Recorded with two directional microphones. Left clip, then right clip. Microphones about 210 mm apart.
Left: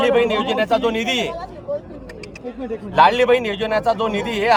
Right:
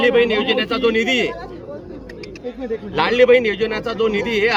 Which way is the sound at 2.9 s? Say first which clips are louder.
Even; 40° left (ahead or behind).